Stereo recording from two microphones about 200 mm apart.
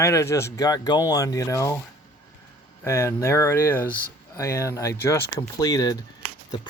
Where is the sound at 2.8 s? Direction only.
15° left (ahead or behind).